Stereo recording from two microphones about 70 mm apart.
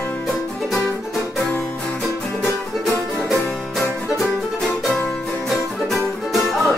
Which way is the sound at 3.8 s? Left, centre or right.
Centre.